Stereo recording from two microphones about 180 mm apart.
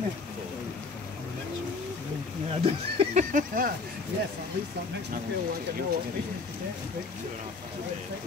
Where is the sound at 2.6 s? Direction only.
35° right (ahead or behind).